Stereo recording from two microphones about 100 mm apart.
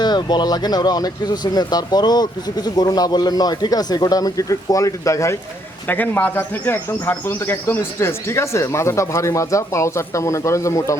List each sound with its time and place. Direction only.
0.0 s speech: 45° left (ahead or behind)
5.9 s speech: 15° left (ahead or behind)